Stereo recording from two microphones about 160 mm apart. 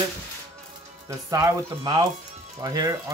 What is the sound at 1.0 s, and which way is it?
Speech, 20° right (ahead or behind).